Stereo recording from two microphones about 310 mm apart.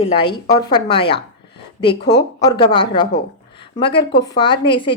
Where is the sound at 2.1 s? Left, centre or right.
Centre.